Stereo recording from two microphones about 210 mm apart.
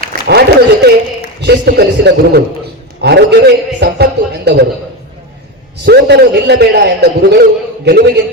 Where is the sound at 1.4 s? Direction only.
50° right (ahead or behind).